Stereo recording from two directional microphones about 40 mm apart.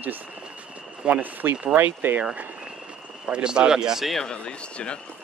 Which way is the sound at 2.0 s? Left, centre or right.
Right.